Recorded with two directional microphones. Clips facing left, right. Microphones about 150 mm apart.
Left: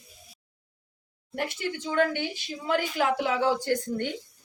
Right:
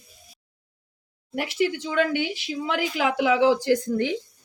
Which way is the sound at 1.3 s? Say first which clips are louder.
Right 6 dB; 90° right.